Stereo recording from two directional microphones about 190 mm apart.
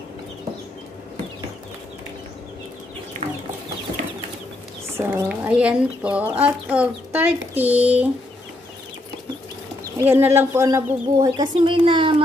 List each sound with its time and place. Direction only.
3.2 s chicken: 30° right (ahead or behind)
4.9 s speech: 10° right (ahead or behind)
9.9 s a child's voice: 10° right (ahead or behind)